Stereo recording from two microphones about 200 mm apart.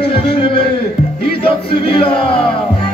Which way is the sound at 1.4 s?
25° left (ahead or behind).